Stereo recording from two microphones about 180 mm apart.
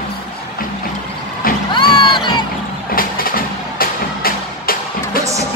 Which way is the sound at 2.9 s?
55° left (ahead or behind).